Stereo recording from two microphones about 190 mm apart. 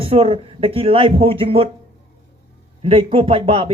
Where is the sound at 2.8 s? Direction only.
30° right (ahead or behind).